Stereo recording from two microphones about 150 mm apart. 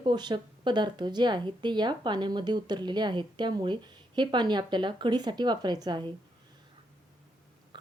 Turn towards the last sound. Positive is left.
turn(degrees=-30)  # may be behind; listen again after turning